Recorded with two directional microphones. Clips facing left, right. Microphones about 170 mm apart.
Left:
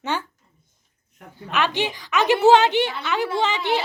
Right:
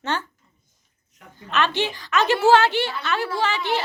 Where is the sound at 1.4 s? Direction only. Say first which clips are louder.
Even; 15° left (ahead or behind).